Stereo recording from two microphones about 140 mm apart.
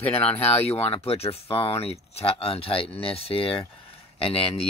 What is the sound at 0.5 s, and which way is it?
Speech, 45° left (ahead or behind).